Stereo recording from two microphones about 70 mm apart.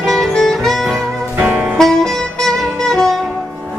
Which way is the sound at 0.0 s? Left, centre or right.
Centre.